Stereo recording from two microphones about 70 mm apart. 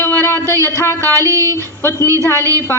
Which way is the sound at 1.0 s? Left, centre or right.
Right.